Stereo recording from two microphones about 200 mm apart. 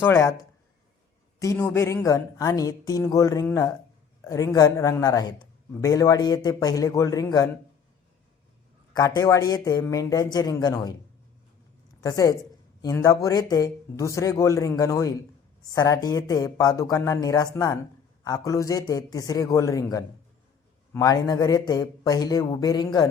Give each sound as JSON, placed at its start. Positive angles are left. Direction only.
{"t": 0.0, "sound": "a man's voice", "side_deg": 15}
{"t": 1.4, "sound": "a man's voice", "side_deg": 10}
{"t": 8.9, "sound": "a man's voice", "side_deg": 15}
{"t": 11.9, "sound": "a woman's voice", "side_deg": 15}